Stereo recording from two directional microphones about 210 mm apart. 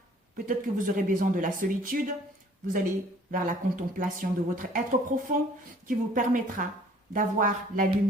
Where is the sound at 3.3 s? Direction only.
40° right (ahead or behind).